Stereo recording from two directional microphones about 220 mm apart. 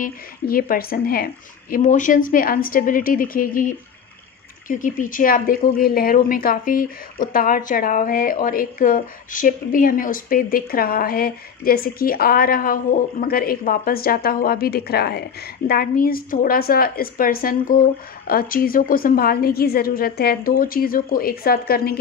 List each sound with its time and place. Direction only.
0.0 s a woman's voice: 40° left (ahead or behind)